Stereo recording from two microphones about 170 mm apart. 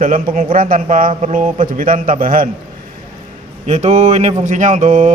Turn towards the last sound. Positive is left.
turn(degrees=-45)  # may be behind; listen again after turning